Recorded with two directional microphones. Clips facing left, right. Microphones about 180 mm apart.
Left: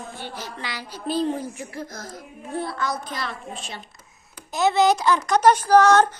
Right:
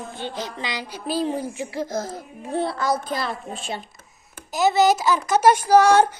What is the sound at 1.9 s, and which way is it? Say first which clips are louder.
A child's voice: right 9 dB; 25° right (ahead or behind).